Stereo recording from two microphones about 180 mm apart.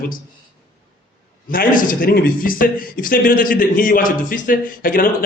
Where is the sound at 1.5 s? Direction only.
50° left (ahead or behind).